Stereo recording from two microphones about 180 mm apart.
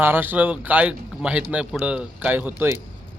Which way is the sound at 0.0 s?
10° right (ahead or behind).